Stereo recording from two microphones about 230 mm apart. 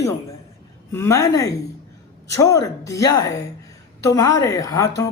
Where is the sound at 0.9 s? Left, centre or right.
Centre.